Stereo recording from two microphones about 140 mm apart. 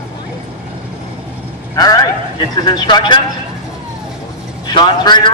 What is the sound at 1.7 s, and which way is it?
A man's voice, 25° left (ahead or behind).